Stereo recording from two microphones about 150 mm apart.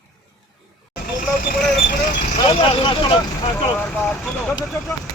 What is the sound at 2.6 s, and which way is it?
Speech, 35° left (ahead or behind).